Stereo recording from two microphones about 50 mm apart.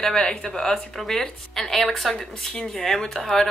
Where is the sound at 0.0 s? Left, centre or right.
Centre.